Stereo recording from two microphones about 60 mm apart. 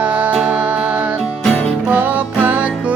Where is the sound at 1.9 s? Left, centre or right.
Right.